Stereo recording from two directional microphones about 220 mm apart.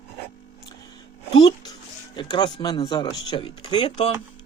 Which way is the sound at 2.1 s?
20° left (ahead or behind).